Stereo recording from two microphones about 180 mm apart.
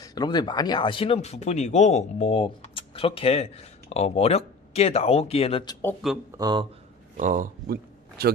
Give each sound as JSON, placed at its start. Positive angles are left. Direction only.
{"t": 0.0, "sound": "speech", "side_deg": 20}
{"t": 6.3, "sound": "speech", "side_deg": -25}
{"t": 7.2, "sound": "speech", "side_deg": -45}